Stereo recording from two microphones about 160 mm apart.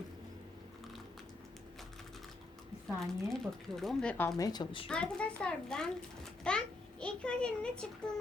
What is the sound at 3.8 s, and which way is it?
Speech, 5° left (ahead or behind).